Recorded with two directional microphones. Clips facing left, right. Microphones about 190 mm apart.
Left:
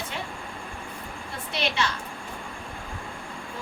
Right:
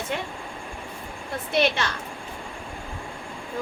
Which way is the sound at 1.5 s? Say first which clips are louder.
Right 7 dB; 50° right (ahead or behind).